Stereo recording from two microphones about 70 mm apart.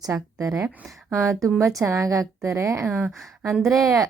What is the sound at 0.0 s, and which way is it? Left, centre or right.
Speech, right.